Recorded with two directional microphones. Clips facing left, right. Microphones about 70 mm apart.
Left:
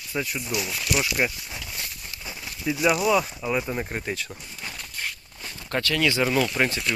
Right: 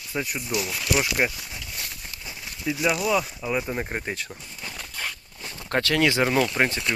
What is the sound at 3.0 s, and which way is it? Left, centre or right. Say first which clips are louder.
Speech: left 2 dB; centre.